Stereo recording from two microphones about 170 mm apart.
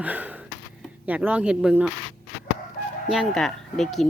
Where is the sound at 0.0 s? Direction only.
10° right (ahead or behind).